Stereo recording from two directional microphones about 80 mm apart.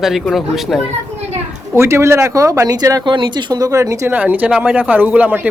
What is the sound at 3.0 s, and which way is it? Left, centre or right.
Speech, right.